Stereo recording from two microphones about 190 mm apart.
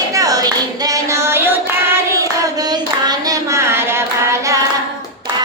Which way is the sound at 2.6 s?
20° right (ahead or behind).